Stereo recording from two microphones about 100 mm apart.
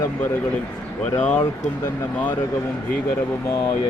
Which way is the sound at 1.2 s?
10° left (ahead or behind).